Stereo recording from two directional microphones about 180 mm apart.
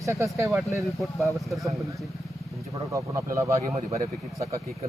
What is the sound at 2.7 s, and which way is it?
Speech, 15° right (ahead or behind).